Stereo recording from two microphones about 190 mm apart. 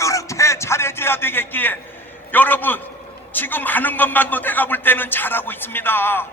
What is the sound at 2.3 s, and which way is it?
A man's voice, 10° left (ahead or behind).